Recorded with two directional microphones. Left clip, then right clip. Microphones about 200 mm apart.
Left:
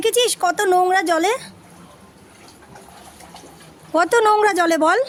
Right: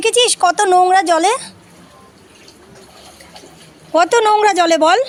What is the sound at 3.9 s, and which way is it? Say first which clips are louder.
Speech: right 3 dB; 10° left (ahead or behind).